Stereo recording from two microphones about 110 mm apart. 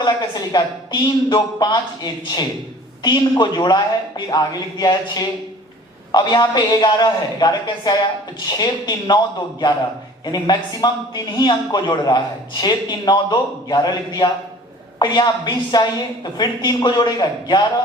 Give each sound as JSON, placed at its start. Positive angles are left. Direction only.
{"t": 0.0, "sound": "a man's voice", "side_deg": 40}